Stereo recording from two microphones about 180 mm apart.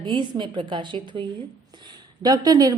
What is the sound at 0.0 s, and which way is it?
A woman's voice, 25° right (ahead or behind).